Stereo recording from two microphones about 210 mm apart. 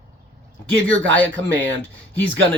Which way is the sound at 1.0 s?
65° right (ahead or behind).